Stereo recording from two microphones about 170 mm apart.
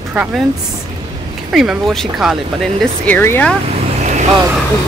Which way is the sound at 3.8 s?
45° right (ahead or behind).